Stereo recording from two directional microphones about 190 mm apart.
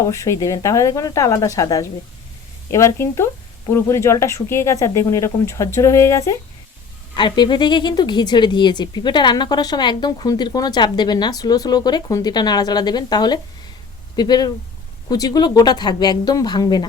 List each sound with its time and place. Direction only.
0.1 s speech: 15° left (ahead or behind)